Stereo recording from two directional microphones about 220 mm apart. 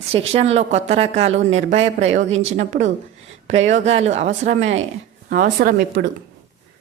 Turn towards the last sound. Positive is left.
turn(degrees=-40)  # may be behind; listen again after turning